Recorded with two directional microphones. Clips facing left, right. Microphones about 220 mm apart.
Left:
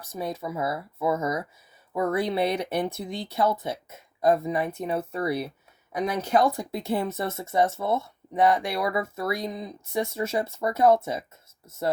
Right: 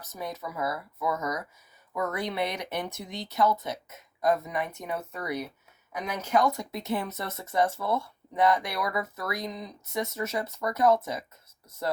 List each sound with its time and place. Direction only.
0.0 s speech: 30° left (ahead or behind)